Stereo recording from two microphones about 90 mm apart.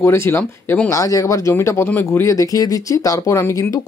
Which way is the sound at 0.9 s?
40° left (ahead or behind).